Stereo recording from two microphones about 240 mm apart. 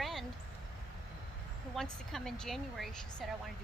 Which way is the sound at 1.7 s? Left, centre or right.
Centre.